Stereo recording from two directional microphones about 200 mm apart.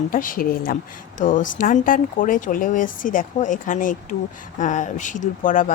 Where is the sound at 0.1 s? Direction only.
45° left (ahead or behind).